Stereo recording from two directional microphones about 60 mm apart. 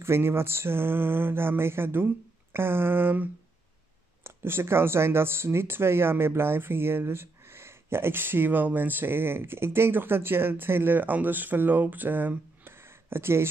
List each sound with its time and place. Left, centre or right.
0.0 s speech: right